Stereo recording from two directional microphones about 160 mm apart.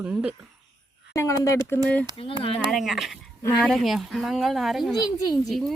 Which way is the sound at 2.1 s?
35° left (ahead or behind).